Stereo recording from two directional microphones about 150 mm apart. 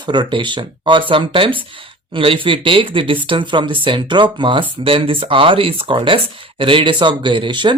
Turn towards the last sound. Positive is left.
turn(degrees=-30)  # may be behind; listen again after turning